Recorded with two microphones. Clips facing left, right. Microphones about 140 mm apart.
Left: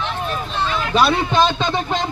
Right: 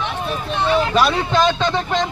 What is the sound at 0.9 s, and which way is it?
Speech, 15° left (ahead or behind).